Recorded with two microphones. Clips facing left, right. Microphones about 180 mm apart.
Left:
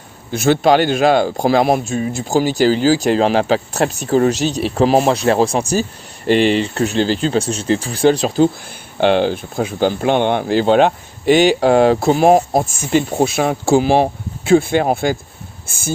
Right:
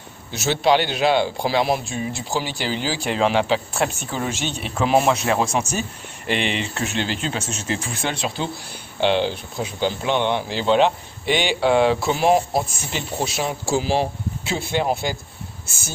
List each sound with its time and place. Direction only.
0.3 s speech: 50° left (ahead or behind)
9.0 s speech: 50° left (ahead or behind)
15.6 s a sound: 55° left (ahead or behind)